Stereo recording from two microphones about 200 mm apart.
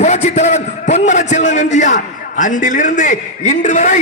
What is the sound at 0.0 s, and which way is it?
A man's voice, 35° left (ahead or behind).